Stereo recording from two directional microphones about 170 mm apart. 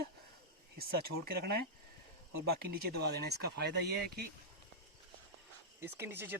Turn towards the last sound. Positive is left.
turn(degrees=-15)  # may be behind; listen again after turning